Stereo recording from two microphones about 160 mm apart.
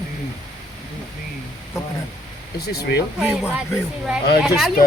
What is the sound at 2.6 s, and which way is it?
Speech, 85° left.